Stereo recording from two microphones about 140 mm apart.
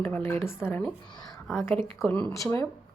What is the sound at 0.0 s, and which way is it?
Speech, 15° left (ahead or behind).